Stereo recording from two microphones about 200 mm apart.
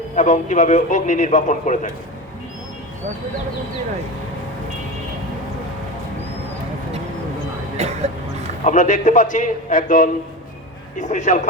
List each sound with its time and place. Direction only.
0.2 s a man's voice: 40° left (ahead or behind)
7.8 s a sound: 35° right (ahead or behind)
8.6 s a man's voice: 40° left (ahead or behind)